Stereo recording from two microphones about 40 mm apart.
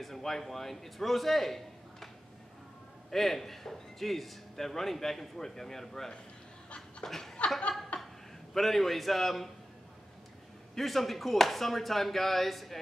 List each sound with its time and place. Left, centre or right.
0.0 s a man's voice: centre
3.1 s a man's voice: centre
7.9 s chuckle: left
8.5 s speech: centre
10.7 s speech: centre